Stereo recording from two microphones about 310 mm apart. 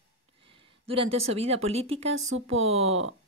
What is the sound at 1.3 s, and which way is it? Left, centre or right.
A woman's voice, centre.